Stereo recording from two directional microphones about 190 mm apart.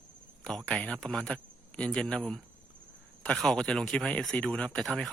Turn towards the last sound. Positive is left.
turn(degrees=0)  # may be behind; listen again after turning